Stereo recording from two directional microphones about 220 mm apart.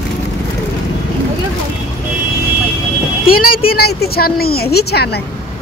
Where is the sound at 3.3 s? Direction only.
40° left (ahead or behind).